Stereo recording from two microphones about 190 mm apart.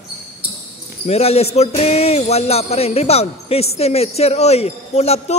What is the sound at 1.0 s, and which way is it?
Speech, 35° left (ahead or behind).